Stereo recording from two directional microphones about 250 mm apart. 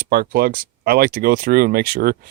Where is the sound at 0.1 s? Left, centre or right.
Right.